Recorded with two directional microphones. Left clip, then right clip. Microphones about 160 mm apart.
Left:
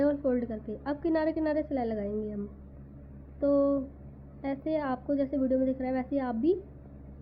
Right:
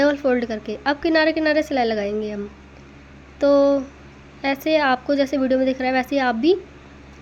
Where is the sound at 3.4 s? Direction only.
25° right (ahead or behind).